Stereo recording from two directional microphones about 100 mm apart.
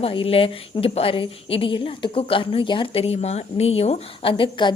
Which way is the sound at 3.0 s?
85° left.